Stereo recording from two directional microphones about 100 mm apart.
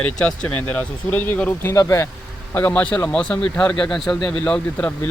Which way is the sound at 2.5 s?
15° left (ahead or behind).